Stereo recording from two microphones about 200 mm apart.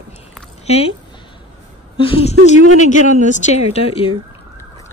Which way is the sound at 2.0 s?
25° left (ahead or behind).